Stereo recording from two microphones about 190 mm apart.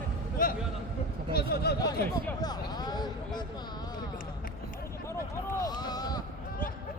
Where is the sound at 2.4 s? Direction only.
20° left (ahead or behind).